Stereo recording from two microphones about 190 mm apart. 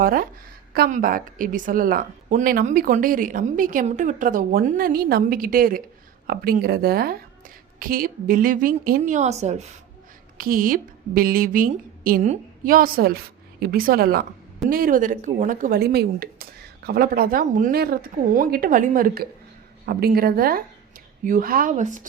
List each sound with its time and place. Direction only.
0.0 s speech: 50° right (ahead or behind)
10.3 s a woman's voice: 50° right (ahead or behind)